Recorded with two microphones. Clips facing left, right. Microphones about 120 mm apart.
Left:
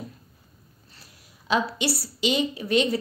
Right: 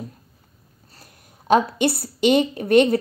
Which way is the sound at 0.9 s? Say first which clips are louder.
Right 5 dB; 50° right (ahead or behind).